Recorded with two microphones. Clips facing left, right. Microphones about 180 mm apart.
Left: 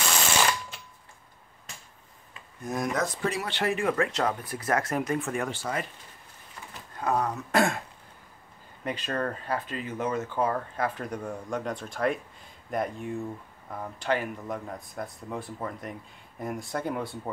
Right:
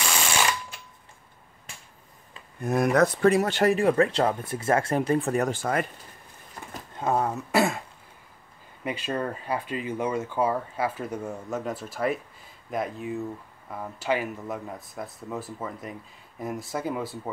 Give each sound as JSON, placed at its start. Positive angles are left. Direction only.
{"t": 2.6, "sound": "speech", "side_deg": -60}
{"t": 7.0, "sound": "speech", "side_deg": -25}
{"t": 7.5, "sound": "speech", "side_deg": -5}
{"t": 8.8, "sound": "speech", "side_deg": -10}